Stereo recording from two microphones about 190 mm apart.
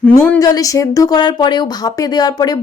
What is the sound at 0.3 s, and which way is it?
Speech, 20° left (ahead or behind).